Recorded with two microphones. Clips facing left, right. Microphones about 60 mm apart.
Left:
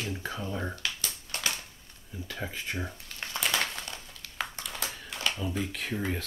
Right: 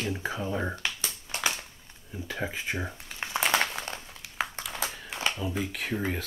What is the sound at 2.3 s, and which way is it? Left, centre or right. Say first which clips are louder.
Speech: right 4 dB; centre.